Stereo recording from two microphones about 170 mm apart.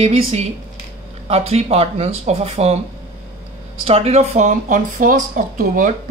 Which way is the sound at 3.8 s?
35° right (ahead or behind).